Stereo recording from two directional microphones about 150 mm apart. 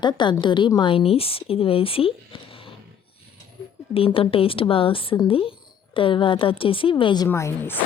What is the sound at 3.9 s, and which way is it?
Speech, 40° left (ahead or behind).